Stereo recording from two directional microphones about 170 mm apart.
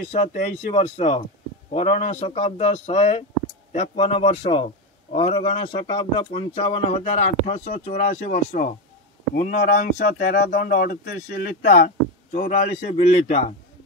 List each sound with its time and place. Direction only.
0.1 s speech: 40° left (ahead or behind)
3.9 s speech: 30° left (ahead or behind)
4.2 s speech: 45° left (ahead or behind); by 11.9 s 60° left (ahead or behind)
12.4 s speech: 40° left (ahead or behind)